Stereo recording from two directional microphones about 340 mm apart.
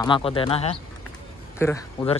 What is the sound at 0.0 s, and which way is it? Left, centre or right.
Speech, centre.